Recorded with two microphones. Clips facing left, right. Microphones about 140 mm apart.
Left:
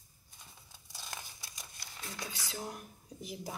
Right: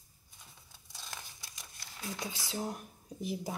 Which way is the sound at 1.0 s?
Centre (ahead or behind).